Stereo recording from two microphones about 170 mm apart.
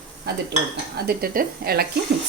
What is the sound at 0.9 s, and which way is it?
Speech, 65° right (ahead or behind).